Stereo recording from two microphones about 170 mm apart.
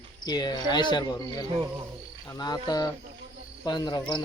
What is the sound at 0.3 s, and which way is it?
Speech, 25° left (ahead or behind).